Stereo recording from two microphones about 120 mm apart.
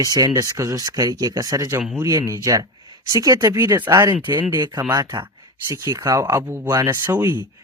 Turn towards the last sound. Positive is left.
turn(degrees=-15)  # may be behind; listen again after turning